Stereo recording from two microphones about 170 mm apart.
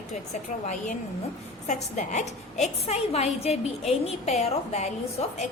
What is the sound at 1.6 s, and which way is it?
A woman's voice, 45° left (ahead or behind).